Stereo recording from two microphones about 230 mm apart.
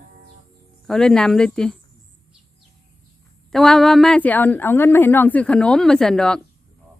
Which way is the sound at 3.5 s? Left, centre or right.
Centre.